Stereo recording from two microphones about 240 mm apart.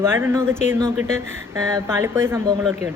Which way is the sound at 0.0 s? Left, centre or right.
Centre.